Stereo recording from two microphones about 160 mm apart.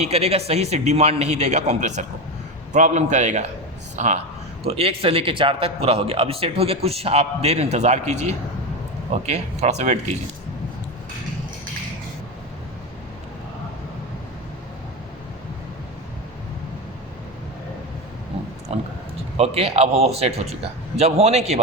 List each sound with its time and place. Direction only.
0.0 s a man's voice: 40° right (ahead or behind)
18.7 s a sound: 40° right (ahead or behind)
19.4 s a man's voice: 40° right (ahead or behind)